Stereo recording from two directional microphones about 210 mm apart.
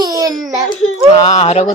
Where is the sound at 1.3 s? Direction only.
30° left (ahead or behind).